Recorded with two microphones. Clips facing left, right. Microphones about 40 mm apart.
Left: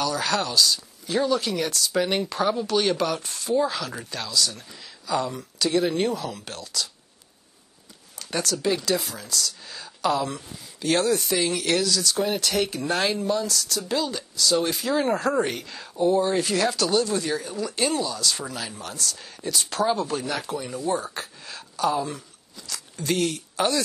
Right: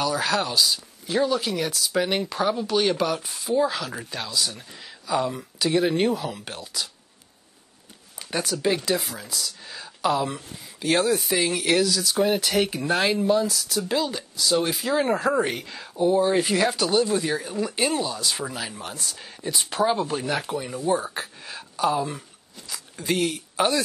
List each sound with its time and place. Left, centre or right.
0.0 s speech: centre
8.2 s speech: centre
16.3 s speech: centre